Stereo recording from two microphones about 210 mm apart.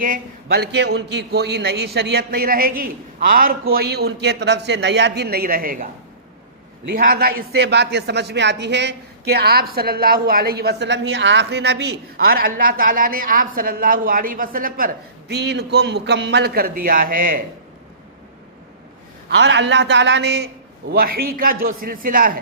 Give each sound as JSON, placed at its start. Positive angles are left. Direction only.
{"t": 0.4, "sound": "a man's voice", "side_deg": -50}
{"t": 6.9, "sound": "a man's voice", "side_deg": -45}
{"t": 19.3, "sound": "a man's voice", "side_deg": -55}